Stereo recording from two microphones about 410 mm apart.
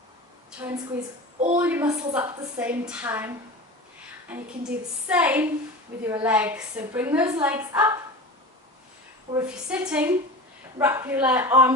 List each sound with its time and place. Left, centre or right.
0.9 s a woman's voice: centre
4.4 s a woman's voice: centre
9.3 s a woman's voice: centre